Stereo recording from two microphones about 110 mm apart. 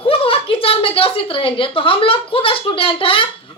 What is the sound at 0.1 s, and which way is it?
A woman's voice, 60° left (ahead or behind).